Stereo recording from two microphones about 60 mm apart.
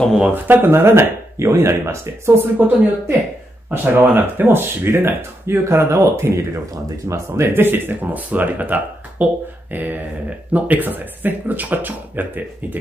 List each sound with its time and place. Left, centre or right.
0.2 s speech: right
1.4 s speech: right
2.6 s speech: right
7.4 s speech: right